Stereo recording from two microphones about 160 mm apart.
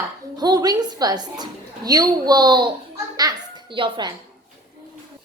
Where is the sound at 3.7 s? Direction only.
30° right (ahead or behind).